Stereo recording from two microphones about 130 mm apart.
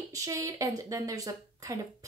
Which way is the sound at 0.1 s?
25° right (ahead or behind).